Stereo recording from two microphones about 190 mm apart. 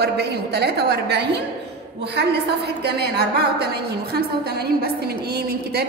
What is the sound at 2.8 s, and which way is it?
A woman's voice, 55° right (ahead or behind).